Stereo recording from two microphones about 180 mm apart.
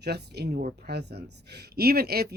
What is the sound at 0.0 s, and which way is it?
Speech, 65° right (ahead or behind).